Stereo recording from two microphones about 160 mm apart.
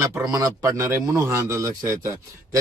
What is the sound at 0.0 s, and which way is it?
A man's voice, 20° right (ahead or behind).